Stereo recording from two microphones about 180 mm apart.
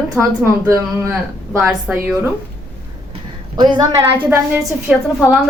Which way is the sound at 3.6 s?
20° right (ahead or behind).